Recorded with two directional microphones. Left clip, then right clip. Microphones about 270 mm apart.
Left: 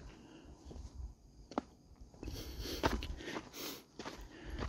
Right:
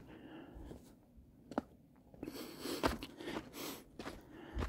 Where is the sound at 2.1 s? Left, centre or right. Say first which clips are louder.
Right 2 dB; right.